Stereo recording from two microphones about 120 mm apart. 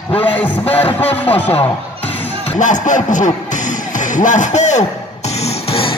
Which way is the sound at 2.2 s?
70° left (ahead or behind).